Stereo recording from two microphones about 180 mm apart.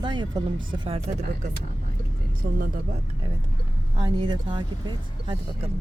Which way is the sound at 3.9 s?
25° right (ahead or behind).